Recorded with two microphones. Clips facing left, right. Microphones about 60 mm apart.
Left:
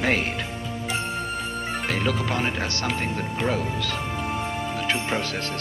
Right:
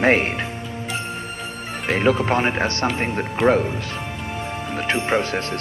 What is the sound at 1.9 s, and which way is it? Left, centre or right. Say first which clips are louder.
Speech: right 9 dB; right.